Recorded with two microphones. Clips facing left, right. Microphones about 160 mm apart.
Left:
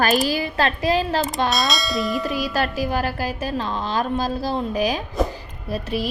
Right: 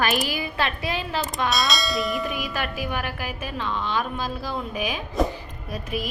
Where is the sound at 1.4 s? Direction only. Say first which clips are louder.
Left 2 dB; centre (ahead or behind).